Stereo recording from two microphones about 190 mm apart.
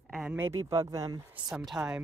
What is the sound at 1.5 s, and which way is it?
Speech, centre (ahead or behind).